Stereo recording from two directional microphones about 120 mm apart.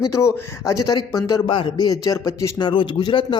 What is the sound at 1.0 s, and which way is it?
A man's voice, 35° left (ahead or behind).